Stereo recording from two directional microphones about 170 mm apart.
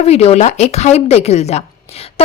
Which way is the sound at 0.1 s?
40° left (ahead or behind).